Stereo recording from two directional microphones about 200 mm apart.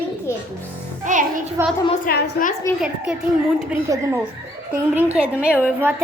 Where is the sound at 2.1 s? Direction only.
50° left (ahead or behind).